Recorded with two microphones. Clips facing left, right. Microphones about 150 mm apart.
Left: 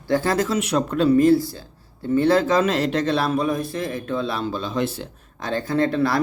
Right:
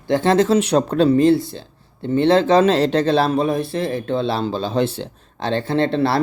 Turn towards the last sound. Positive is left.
turn(degrees=-30)  # may be behind; listen again after turning